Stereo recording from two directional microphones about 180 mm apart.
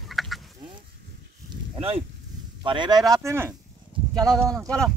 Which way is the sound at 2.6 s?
25° right (ahead or behind).